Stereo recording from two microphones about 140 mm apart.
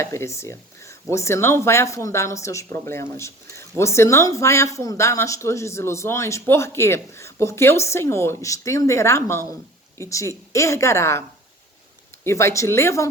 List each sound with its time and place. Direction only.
0.0 s speech: 20° left (ahead or behind)
12.2 s speech: 20° left (ahead or behind)